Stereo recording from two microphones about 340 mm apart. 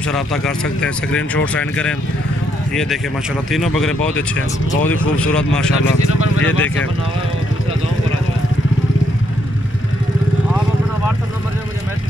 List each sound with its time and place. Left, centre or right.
0.1 s speech: centre
6.2 s speech: left